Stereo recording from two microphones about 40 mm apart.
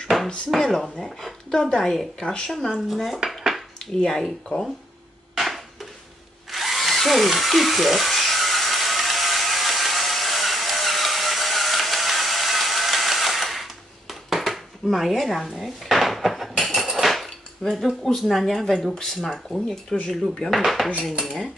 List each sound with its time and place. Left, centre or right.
0.1 s a sound: centre
0.5 s speech: centre
1.5 s speech: centre
1.8 s speech: centre
2.9 s speech: centre
3.3 s dishes: centre
4.1 s speech: centre
5.3 s a sound: centre
6.5 s drill: centre
15.5 s dishes: centre
17.6 s speech: centre